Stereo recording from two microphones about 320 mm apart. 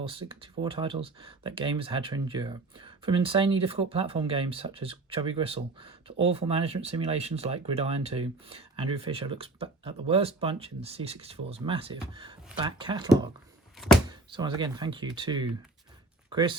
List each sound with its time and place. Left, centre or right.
0.0 s speech: centre
13.7 s a sound: centre
14.1 s speech: centre